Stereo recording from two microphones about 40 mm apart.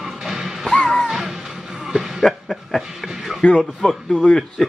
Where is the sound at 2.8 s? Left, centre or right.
Centre.